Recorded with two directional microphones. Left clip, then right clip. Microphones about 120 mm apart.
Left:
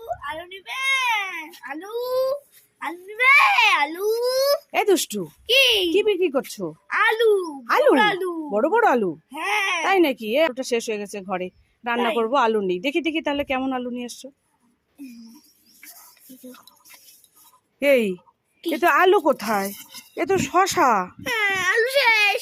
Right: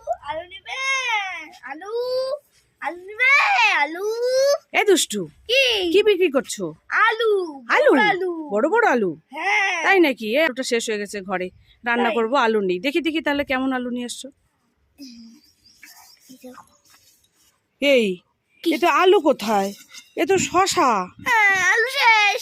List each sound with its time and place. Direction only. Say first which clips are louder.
0.2 s baby cry: right 2 dB; 20° right (ahead or behind)
1.6 s a sound: right 3 dB; 20° right (ahead or behind)
5.9 s speech: right 3 dB; 35° right (ahead or behind)
6.7 s speech: right 1 dB; 15° right (ahead or behind)
17.7 s speech: right 1 dB; 20° right (ahead or behind)
21.2 s baby cry: right 5 dB; 55° right (ahead or behind); by 22.4 s 30° right (ahead or behind)